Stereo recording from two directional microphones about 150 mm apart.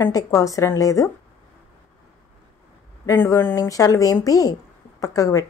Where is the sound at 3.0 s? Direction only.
20° left (ahead or behind).